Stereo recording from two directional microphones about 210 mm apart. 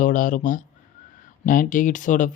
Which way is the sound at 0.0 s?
40° left (ahead or behind).